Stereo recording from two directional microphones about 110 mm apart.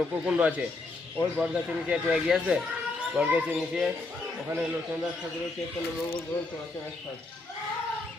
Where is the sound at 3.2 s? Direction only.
20° right (ahead or behind).